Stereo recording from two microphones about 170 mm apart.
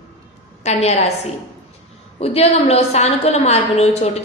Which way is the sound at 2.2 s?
35° left (ahead or behind).